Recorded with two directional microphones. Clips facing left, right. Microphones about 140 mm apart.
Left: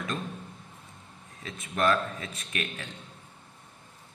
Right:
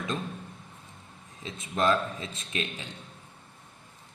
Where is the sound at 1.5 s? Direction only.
25° right (ahead or behind).